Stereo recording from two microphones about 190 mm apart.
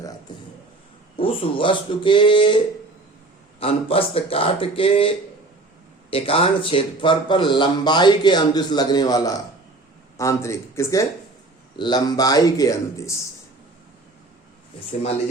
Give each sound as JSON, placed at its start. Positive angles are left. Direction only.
{"t": 0.3, "sound": "a sound", "side_deg": 25}
{"t": 1.1, "sound": "a man's voice", "side_deg": 30}
{"t": 3.6, "sound": "a man's voice", "side_deg": 30}